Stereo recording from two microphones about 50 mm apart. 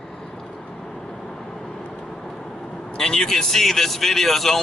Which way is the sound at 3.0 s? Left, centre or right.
Centre.